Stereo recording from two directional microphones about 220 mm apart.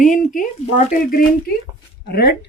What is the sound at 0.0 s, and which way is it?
Speech, 35° left (ahead or behind).